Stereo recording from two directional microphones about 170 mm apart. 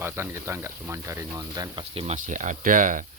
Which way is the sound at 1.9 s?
40° right (ahead or behind).